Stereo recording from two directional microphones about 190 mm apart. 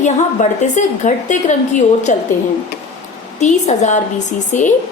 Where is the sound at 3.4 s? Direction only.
40° left (ahead or behind).